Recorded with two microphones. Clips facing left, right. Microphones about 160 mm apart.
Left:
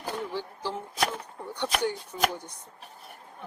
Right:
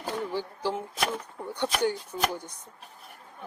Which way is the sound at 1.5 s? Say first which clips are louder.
Right 2 dB; 5° right (ahead or behind).